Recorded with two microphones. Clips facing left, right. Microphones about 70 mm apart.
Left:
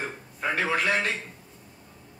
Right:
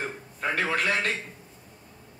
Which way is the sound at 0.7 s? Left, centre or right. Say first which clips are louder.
Left 2 dB; left.